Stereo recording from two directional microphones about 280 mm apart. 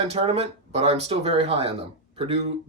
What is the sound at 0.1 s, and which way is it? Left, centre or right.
Speech, right.